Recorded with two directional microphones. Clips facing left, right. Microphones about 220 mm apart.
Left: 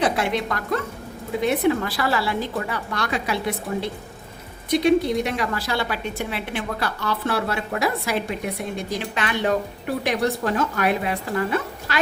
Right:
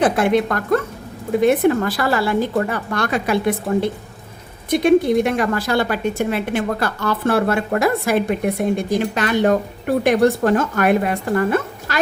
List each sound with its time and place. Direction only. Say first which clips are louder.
0.0 s a woman's voice: right 6 dB; 50° right (ahead or behind)